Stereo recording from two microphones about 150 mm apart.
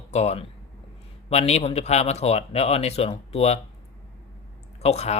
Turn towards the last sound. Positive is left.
turn(degrees=45)  # may be behind; listen again after turning